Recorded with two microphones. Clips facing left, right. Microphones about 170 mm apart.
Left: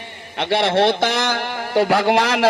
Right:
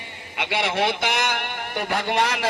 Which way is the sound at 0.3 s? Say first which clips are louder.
Left 7 dB; 30° left (ahead or behind).